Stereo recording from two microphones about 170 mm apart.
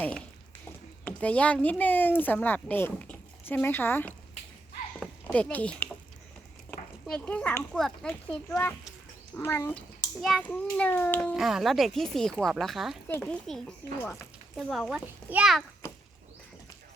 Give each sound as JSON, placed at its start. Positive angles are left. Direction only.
{"t": 1.0, "sound": "speech", "side_deg": 10}
{"t": 4.9, "sound": "a sound", "side_deg": 10}
{"t": 6.7, "sound": "children playing", "side_deg": 5}
{"t": 7.7, "sound": "a child's voice", "side_deg": 0}
{"t": 10.2, "sound": "a child's voice", "side_deg": 0}
{"t": 13.1, "sound": "a child's voice", "side_deg": 10}
{"t": 15.8, "sound": "a sound", "side_deg": 15}